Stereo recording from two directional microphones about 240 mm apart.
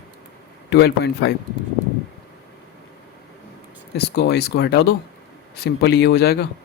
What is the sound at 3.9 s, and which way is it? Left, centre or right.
Speech, left.